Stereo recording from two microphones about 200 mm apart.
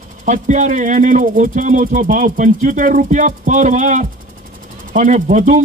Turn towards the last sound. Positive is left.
turn(degrees=-40)  # may be behind; listen again after turning